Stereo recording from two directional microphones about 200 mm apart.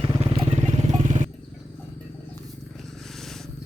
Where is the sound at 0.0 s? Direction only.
30° right (ahead or behind).